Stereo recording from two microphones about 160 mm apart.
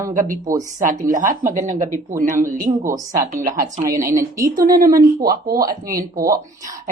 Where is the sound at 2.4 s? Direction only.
20° right (ahead or behind).